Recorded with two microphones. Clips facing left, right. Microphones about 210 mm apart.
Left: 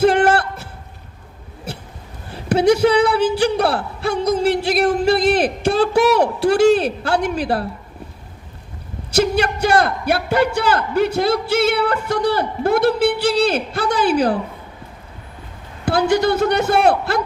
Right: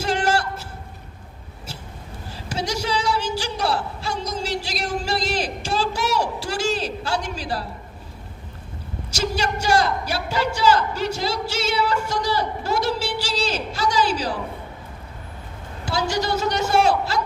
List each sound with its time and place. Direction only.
0.0 s a sound: 60° left (ahead or behind)
1.7 s hiccup: 60° left (ahead or behind)
2.3 s speech: 60° left (ahead or behind)
9.1 s a man's voice: 60° left (ahead or behind)
15.9 s a man's voice: 55° left (ahead or behind)